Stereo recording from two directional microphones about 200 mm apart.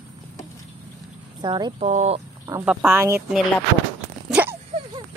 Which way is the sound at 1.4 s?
20° right (ahead or behind).